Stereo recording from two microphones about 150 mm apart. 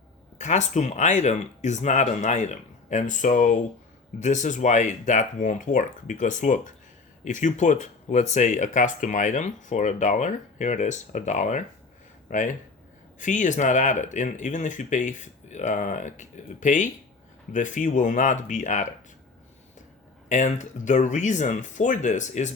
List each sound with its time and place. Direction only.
0.3 s speech: 50° left (ahead or behind)
20.3 s speech: 55° left (ahead or behind)